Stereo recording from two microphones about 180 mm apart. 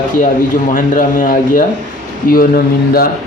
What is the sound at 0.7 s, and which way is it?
Speech, 45° left (ahead or behind).